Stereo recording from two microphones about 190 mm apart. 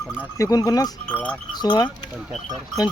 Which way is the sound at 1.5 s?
20° left (ahead or behind).